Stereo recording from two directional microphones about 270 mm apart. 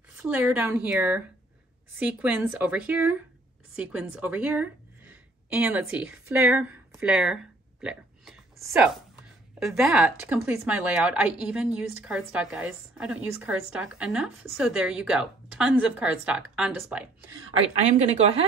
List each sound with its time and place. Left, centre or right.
0.2 s a woman's voice: centre
17.6 s a woman's voice: right